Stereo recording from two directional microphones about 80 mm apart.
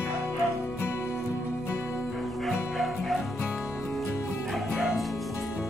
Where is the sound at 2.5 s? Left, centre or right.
Centre.